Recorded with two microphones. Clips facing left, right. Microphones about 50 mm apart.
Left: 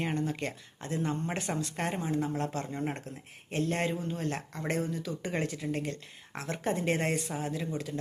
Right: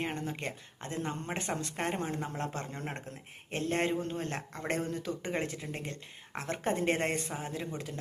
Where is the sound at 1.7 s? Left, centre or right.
Centre.